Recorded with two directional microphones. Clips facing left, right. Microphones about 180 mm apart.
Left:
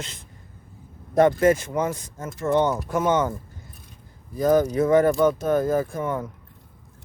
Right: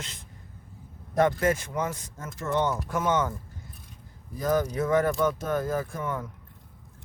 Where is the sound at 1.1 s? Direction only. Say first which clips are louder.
Left 6 dB; 20° left (ahead or behind).